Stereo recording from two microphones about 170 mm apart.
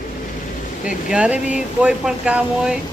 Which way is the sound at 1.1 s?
5° right (ahead or behind).